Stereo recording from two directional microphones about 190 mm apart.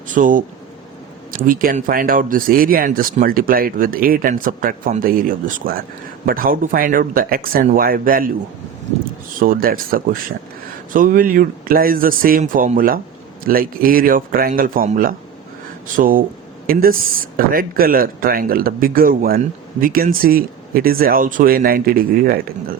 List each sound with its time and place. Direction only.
0.1 s speech: 45° right (ahead or behind)
1.5 s speech: 45° right (ahead or behind)
9.4 s speech: 50° right (ahead or behind)